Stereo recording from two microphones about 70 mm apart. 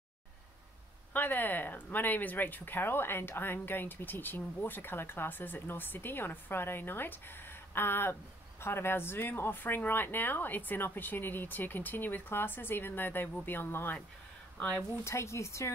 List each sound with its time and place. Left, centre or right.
1.1 s speech: left
14.6 s speech: centre
15.0 s speech: left